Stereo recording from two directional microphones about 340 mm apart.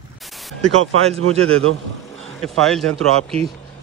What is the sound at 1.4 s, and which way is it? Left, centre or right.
Speech, right.